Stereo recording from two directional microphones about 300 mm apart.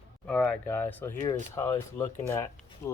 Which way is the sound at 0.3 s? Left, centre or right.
Centre.